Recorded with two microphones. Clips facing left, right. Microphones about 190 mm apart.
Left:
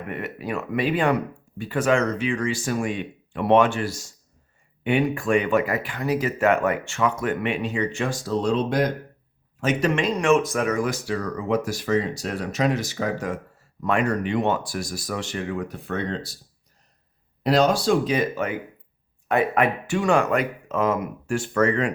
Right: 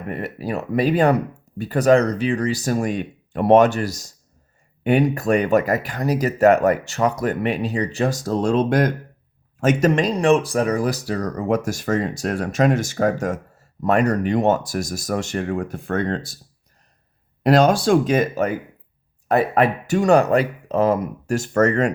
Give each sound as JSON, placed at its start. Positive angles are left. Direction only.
{"t": 0.1, "sound": "speech", "side_deg": -35}
{"t": 17.4, "sound": "speech", "side_deg": -50}